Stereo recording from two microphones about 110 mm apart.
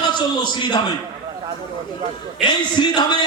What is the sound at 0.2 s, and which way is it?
Speech, 40° left (ahead or behind).